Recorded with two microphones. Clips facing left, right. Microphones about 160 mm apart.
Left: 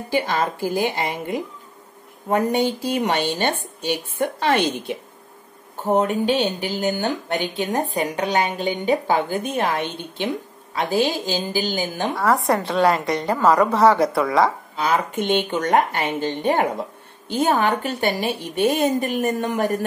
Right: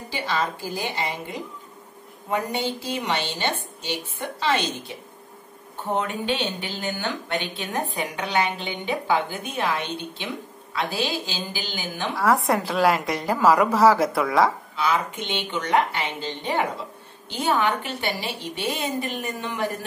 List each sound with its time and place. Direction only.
0.1 s a woman's voice: 50° left (ahead or behind)
2.2 s a woman's voice: 45° left (ahead or behind)
5.8 s a woman's voice: 40° left (ahead or behind)
12.2 s a woman's voice: centre (ahead or behind)
14.8 s a woman's voice: 45° left (ahead or behind)